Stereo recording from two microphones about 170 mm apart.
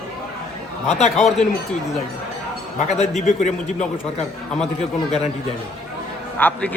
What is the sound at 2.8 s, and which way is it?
A man's voice, 40° left (ahead or behind).